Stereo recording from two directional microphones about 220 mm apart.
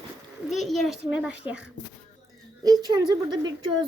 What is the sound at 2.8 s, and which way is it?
Speech, 20° right (ahead or behind).